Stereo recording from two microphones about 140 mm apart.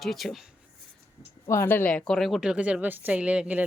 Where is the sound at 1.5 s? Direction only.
15° left (ahead or behind).